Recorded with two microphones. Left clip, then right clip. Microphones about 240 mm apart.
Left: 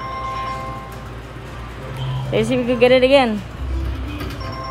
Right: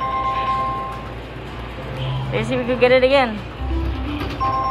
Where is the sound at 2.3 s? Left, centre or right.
Left.